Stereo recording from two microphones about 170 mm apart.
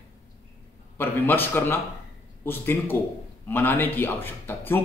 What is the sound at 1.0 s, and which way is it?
A man's voice, 10° left (ahead or behind).